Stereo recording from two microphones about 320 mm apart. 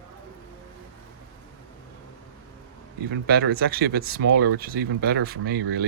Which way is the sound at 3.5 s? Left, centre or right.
Right.